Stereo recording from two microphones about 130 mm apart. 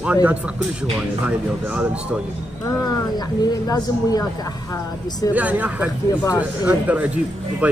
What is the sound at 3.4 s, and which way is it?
Speech, 30° left (ahead or behind).